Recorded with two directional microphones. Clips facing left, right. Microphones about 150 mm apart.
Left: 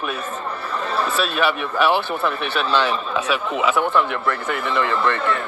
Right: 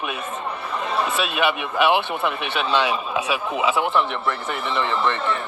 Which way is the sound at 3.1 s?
15° right (ahead or behind).